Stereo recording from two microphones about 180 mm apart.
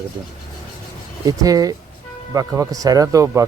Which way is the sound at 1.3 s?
20° right (ahead or behind).